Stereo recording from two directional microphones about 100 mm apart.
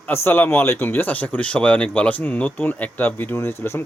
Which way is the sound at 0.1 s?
20° left (ahead or behind).